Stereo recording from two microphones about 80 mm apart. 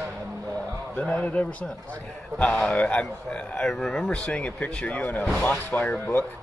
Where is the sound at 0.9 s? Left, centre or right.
Centre.